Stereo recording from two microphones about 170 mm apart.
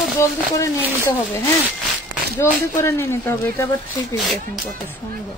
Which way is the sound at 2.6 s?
15° left (ahead or behind).